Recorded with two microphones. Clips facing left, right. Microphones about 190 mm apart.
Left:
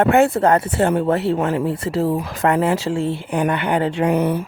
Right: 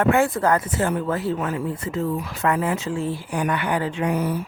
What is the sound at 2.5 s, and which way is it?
Speech, 75° left (ahead or behind).